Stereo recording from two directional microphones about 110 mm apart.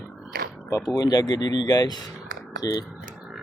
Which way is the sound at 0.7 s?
35° left (ahead or behind).